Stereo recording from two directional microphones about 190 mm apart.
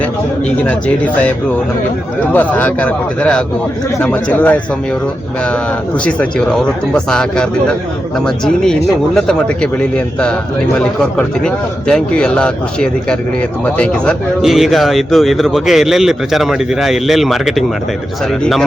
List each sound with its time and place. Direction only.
0.6 s a man's voice: 5° left (ahead or behind)
2.3 s a man's voice: 10° left (ahead or behind)
6.1 s a man's voice: 5° left (ahead or behind)